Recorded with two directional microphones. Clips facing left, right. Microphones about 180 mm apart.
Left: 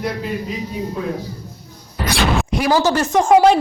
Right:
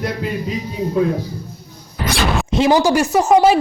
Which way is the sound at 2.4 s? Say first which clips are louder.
Right 7 dB; 25° right (ahead or behind).